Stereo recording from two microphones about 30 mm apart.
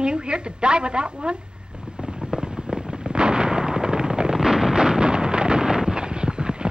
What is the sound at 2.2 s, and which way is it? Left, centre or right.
Fireworks, centre.